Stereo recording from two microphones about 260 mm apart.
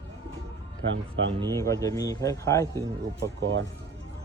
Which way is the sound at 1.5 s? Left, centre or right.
Centre.